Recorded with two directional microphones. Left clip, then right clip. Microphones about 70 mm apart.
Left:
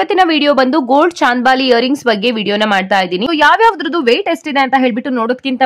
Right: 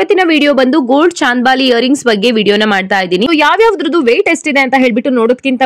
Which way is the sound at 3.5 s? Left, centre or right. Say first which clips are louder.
Right 2 dB; right.